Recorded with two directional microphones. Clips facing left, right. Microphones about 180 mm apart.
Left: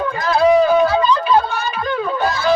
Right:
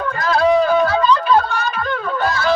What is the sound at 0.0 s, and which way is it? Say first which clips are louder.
Music: left 1 dB; 10° left (ahead or behind).